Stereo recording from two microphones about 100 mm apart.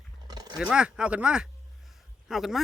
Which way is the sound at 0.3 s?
40° right (ahead or behind).